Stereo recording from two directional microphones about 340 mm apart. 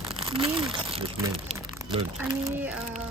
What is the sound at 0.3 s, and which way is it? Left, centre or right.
Speech, centre.